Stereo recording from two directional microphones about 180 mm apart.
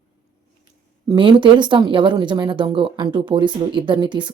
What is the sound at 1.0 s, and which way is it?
Speech, 30° right (ahead or behind).